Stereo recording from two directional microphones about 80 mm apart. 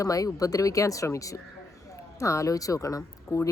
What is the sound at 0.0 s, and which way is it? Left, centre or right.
Speech, left.